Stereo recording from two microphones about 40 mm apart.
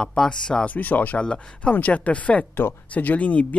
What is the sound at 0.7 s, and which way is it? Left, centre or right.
Speech, left.